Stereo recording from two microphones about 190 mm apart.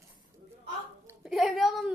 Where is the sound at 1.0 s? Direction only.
5° right (ahead or behind).